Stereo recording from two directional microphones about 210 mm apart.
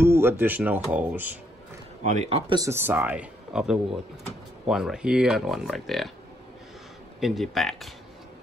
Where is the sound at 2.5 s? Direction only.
15° right (ahead or behind).